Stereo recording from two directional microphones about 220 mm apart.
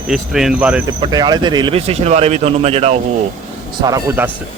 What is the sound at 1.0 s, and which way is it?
Speech, 20° right (ahead or behind).